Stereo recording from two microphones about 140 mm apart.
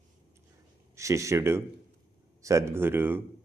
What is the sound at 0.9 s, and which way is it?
Speech, 20° right (ahead or behind).